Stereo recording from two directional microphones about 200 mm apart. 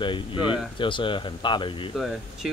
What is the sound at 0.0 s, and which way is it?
Speech, 25° left (ahead or behind).